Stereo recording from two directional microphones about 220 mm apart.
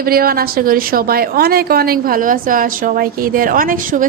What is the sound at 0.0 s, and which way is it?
A woman's voice, 40° right (ahead or behind).